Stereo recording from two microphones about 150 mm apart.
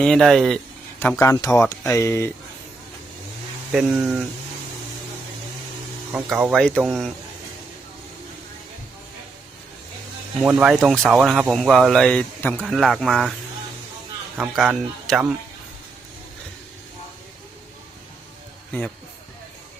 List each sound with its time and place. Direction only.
0.0 s speech: centre (ahead or behind)
0.9 s speech: 15° left (ahead or behind)
3.7 s speech: 5° right (ahead or behind)
6.2 s speech: 5° right (ahead or behind)
10.4 s speech: 5° right (ahead or behind)
12.6 s speech: centre (ahead or behind)
14.5 s speech: centre (ahead or behind)